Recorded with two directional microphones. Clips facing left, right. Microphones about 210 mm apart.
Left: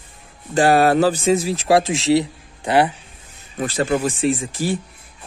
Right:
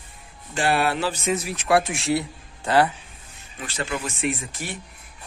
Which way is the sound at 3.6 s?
35° left (ahead or behind).